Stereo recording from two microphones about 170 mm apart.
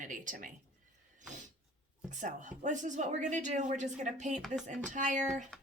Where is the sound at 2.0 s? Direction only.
45° right (ahead or behind).